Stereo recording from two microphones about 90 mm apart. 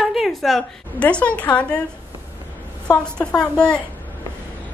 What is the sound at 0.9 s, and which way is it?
Speech, 15° left (ahead or behind).